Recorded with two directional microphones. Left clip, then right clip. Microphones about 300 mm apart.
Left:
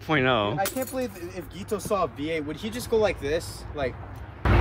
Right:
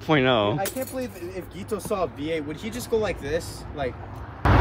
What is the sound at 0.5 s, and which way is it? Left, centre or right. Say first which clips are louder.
Speech: left 1 dB; left.